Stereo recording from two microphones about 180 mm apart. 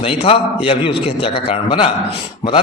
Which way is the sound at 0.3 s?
30° left (ahead or behind).